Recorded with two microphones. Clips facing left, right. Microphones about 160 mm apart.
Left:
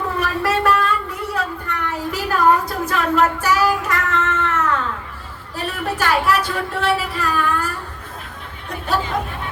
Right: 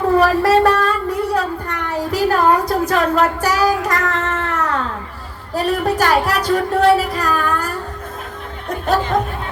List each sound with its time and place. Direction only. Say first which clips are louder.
0.2 s a sound: right 5 dB; 35° right (ahead or behind)
5.5 s speech: right 7 dB; 40° right (ahead or behind)
8.7 s speech: right 5 dB; 45° right (ahead or behind)